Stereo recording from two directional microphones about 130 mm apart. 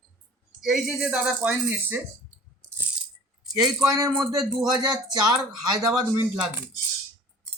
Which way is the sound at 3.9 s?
25° right (ahead or behind).